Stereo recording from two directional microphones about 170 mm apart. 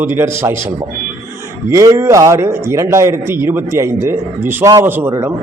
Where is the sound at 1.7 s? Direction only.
20° right (ahead or behind).